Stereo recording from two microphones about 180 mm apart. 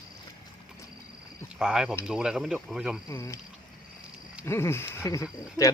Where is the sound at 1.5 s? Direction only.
5° right (ahead or behind).